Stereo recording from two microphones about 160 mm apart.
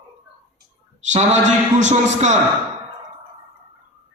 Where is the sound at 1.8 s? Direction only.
45° right (ahead or behind).